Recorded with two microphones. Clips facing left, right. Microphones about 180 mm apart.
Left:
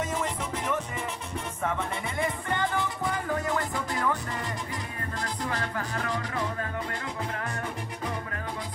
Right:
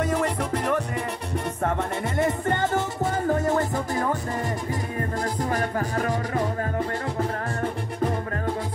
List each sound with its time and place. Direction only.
0.0 s music: 65° right (ahead or behind)
1.6 s music: 45° right (ahead or behind)
5.2 s music: 45° right (ahead or behind)